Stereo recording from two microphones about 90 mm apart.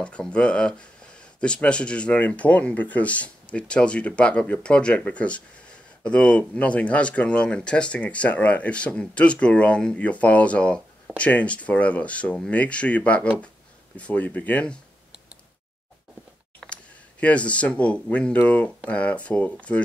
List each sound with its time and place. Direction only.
0.0 s speech: 10° left (ahead or behind)
16.5 s speech: 15° left (ahead or behind)